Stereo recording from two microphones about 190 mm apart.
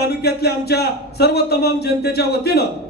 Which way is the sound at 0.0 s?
60° left (ahead or behind).